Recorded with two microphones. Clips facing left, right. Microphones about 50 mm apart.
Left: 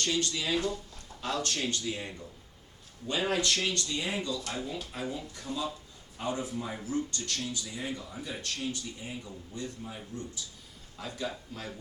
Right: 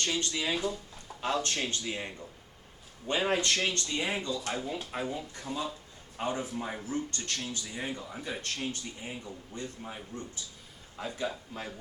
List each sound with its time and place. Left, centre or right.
0.0 s speech: right
1.2 s speech: right